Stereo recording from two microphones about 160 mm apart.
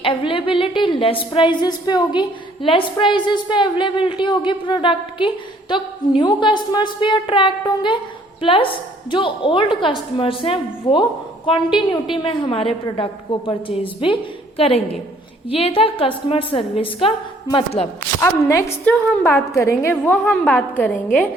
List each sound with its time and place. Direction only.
0.0 s a woman's voice: 35° left (ahead or behind)
15.4 s a woman's voice: 35° left (ahead or behind)
18.2 s a woman's voice: 20° left (ahead or behind)